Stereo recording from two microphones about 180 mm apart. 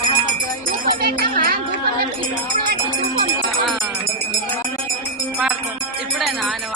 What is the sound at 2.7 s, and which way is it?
Music, 55° right (ahead or behind).